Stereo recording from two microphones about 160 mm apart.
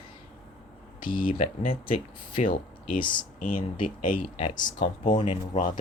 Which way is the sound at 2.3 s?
55° left (ahead or behind).